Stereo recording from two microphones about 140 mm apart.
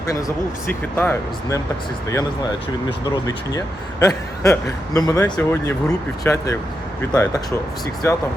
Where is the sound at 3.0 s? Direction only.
25° left (ahead or behind).